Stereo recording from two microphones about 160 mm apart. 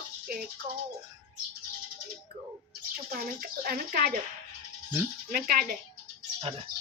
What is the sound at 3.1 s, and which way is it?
Speech, 70° right (ahead or behind).